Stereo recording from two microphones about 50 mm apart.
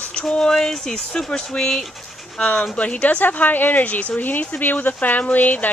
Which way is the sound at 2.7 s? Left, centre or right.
Left.